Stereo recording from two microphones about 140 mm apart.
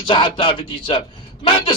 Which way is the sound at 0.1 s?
35° left (ahead or behind).